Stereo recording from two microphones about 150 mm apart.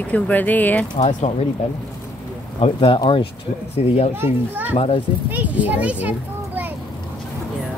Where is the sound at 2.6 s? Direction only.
40° left (ahead or behind).